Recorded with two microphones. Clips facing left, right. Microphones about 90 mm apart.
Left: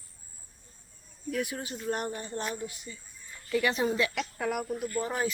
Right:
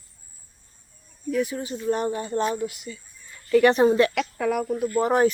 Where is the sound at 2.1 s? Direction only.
90° right.